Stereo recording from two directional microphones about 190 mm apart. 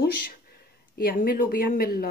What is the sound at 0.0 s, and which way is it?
Speech, 50° left (ahead or behind).